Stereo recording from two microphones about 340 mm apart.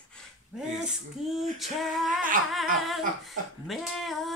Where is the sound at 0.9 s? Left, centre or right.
Centre.